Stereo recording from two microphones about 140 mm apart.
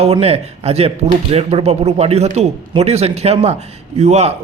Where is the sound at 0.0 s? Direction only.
45° right (ahead or behind).